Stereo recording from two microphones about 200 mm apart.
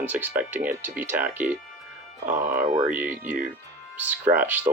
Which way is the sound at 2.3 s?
40° right (ahead or behind).